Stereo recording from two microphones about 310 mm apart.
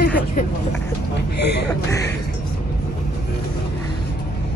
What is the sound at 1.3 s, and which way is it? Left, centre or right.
Speech, left.